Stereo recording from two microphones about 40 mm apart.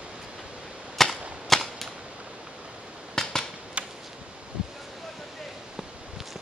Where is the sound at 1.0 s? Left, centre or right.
Centre.